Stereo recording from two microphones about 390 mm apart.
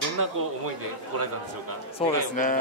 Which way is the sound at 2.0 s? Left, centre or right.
Centre.